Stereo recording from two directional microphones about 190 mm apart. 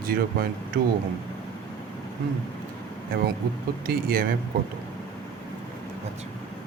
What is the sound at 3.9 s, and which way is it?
Speech, 50° right (ahead or behind).